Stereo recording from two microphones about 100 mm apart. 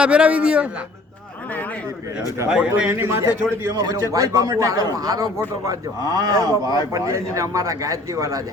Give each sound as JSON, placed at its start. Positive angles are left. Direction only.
{"t": 0.0, "sound": "a man's voice", "side_deg": -10}
{"t": 2.5, "sound": "a man's voice", "side_deg": -10}
{"t": 2.9, "sound": "a man's voice", "side_deg": -25}
{"t": 3.8, "sound": "a man's voice", "side_deg": -35}